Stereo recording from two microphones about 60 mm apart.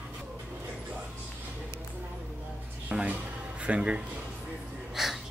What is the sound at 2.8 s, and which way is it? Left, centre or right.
Speech, right.